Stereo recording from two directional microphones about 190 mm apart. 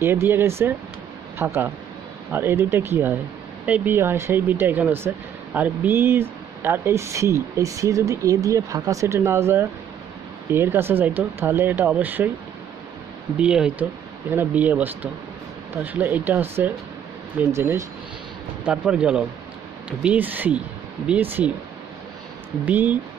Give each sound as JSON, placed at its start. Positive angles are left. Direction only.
{"t": 0.0, "sound": "speech", "side_deg": -10}
{"t": 13.4, "sound": "speech", "side_deg": -5}
{"t": 22.7, "sound": "speech", "side_deg": -10}